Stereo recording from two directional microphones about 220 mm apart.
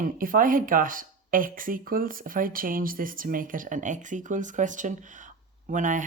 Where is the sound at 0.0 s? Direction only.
40° right (ahead or behind).